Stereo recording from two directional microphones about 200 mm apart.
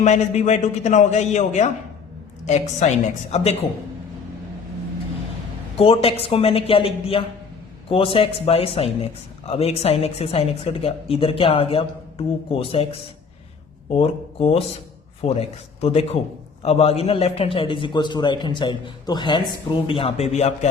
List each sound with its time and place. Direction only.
0.0 s a man's voice: 35° left (ahead or behind)
5.7 s a woman's voice: 30° left (ahead or behind)